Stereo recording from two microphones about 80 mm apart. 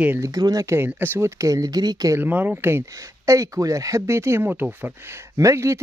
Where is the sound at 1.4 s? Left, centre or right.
Right.